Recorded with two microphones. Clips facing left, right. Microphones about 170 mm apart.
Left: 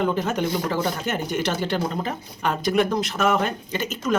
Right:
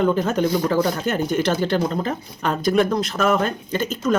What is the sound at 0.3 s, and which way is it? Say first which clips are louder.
Speech: right 5 dB; 15° left (ahead or behind).